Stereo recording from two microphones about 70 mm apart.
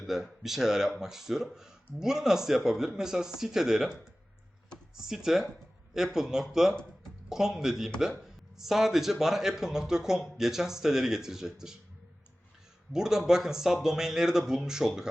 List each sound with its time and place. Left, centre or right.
0.0 s a man's voice: centre
12.9 s speech: centre